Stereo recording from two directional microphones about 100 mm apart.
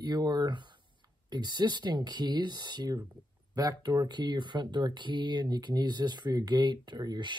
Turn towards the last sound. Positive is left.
turn(degrees=-45)  # may be behind; listen again after turning